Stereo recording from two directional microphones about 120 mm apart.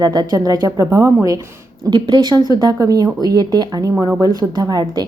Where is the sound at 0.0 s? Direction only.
35° right (ahead or behind).